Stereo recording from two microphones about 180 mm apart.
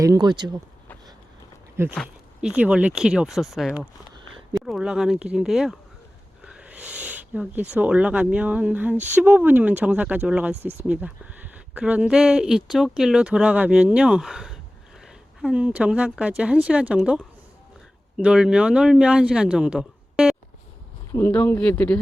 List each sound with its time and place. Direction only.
0.0 s speech: 20° right (ahead or behind)
1.7 s speech: 15° right (ahead or behind)
4.2 s a sound: 30° right (ahead or behind)
4.5 s speech: centre (ahead or behind)
6.4 s a sound: 5° right (ahead or behind)
7.7 s speech: 5° right (ahead or behind)
10.5 s speech: 35° right (ahead or behind)
10.8 s speech: 5° right (ahead or behind)
21.1 s speech: 15° left (ahead or behind)